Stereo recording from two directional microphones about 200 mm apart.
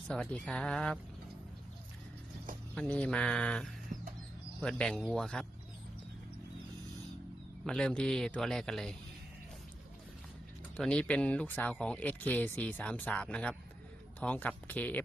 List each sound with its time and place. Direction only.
0.1 s a man's voice: 5° left (ahead or behind)
2.7 s a man's voice: 5° left (ahead or behind)
3.9 s bird: 40° right (ahead or behind)
4.6 s a man's voice: 5° left (ahead or behind)
7.6 s a man's voice: 5° left (ahead or behind)
10.8 s speech: 5° left (ahead or behind)